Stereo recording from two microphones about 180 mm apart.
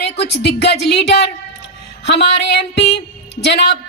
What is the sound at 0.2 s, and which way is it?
A woman's voice, 65° left (ahead or behind).